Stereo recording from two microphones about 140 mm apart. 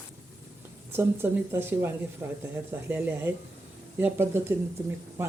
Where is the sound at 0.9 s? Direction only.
15° right (ahead or behind).